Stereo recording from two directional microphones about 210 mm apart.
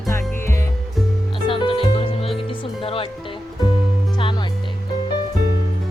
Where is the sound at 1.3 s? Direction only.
25° left (ahead or behind).